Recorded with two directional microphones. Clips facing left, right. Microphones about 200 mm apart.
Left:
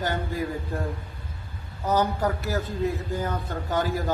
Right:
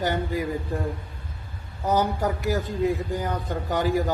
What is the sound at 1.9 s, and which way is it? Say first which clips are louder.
Speech: left 1 dB; 15° right (ahead or behind).